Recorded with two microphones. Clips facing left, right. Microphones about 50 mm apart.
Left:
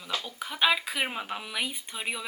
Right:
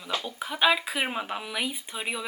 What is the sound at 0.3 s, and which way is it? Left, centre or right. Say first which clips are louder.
Speech: right 2 dB; centre.